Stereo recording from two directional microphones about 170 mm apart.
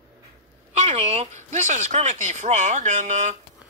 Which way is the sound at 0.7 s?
40° right (ahead or behind).